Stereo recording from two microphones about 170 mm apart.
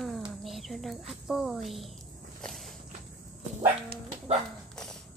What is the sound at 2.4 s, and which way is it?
Walk, centre (ahead or behind).